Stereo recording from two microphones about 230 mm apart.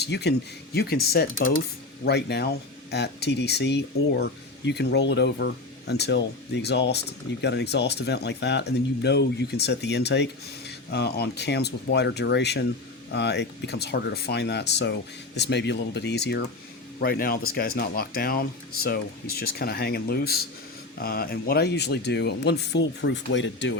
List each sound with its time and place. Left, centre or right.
0.0 s speech: left